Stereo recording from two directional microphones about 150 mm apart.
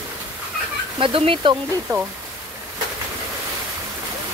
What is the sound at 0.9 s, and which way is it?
Speech, 35° right (ahead or behind).